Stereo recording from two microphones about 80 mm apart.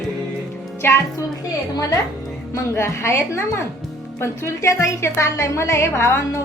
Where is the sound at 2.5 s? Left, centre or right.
Left.